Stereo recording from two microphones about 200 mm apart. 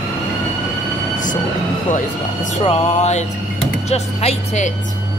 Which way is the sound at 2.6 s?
30° left (ahead or behind).